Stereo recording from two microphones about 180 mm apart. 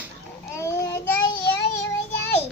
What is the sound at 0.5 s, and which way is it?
Child singing, 15° left (ahead or behind).